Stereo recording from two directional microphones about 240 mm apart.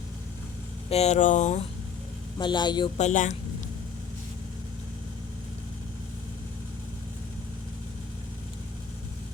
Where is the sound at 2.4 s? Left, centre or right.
Centre.